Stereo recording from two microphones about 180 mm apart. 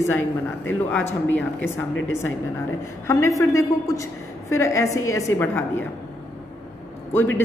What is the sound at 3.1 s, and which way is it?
A woman's voice, 15° left (ahead or behind).